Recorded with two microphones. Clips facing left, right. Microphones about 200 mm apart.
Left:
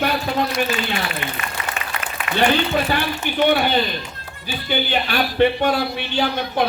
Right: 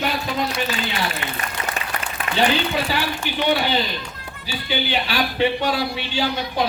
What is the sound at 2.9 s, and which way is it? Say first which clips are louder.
Speech: left 2 dB; 50° left (ahead or behind).